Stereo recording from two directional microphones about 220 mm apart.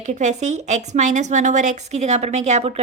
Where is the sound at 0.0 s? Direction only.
35° right (ahead or behind).